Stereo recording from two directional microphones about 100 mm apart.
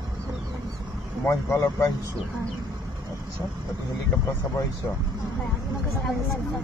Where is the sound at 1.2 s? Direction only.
30° left (ahead or behind).